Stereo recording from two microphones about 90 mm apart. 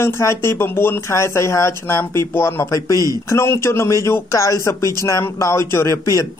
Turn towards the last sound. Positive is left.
turn(degrees=35)  # may be behind; listen again after turning